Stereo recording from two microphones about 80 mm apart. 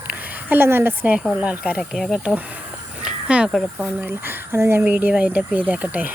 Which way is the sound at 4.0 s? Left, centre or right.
Right.